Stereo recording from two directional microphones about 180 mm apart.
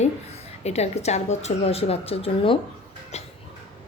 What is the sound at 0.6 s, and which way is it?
A woman's voice, 35° left (ahead or behind).